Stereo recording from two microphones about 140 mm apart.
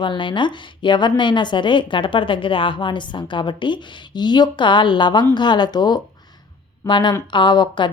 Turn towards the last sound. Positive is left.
turn(degrees=35)  # may be behind; listen again after turning